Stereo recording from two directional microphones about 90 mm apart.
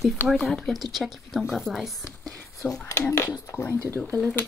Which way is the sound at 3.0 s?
35° left (ahead or behind).